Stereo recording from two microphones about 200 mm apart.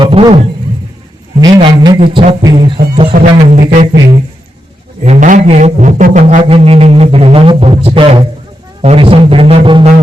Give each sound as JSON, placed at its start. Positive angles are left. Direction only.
{"t": 0.0, "sound": "speech", "side_deg": -25}
{"t": 1.4, "sound": "speech", "side_deg": -20}
{"t": 2.0, "sound": "music", "side_deg": -30}
{"t": 2.4, "sound": "speech", "side_deg": -20}
{"t": 2.7, "sound": "speech", "side_deg": -50}
{"t": 3.2, "sound": "music", "side_deg": -40}
{"t": 5.0, "sound": "music", "side_deg": -40}
{"t": 7.9, "sound": "speech", "side_deg": -25}